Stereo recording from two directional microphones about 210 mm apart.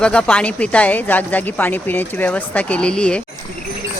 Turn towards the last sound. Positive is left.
turn(degrees=5)  # may be behind; listen again after turning